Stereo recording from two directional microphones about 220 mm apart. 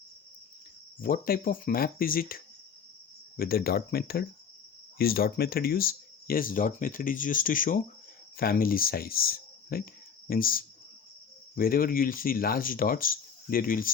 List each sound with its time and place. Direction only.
1.0 s speech: 40° left (ahead or behind)